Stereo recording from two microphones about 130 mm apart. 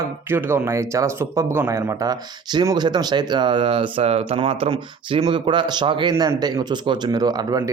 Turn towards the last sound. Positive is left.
turn(degrees=-30)  # may be behind; listen again after turning